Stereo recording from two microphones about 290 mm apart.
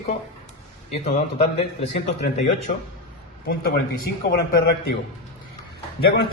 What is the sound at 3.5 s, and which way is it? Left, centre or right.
Speech, left.